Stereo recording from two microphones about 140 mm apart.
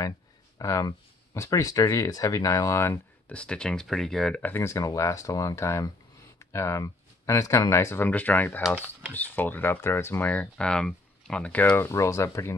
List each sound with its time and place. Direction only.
0.6 s speech: 25° left (ahead or behind)
3.3 s speech: 5° left (ahead or behind)